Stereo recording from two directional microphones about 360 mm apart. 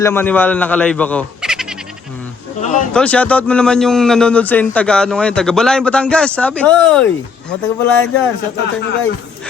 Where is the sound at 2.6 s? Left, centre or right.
Centre.